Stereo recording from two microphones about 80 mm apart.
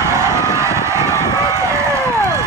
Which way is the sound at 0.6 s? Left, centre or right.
Right.